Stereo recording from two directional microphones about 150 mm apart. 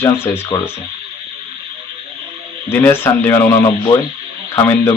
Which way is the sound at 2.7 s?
15° left (ahead or behind).